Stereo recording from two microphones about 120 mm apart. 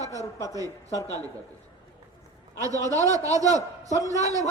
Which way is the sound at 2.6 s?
30° right (ahead or behind).